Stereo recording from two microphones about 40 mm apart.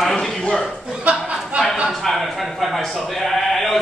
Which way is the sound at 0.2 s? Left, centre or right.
Centre.